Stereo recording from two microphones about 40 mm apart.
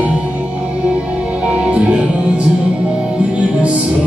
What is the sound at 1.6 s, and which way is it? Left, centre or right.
Music, right.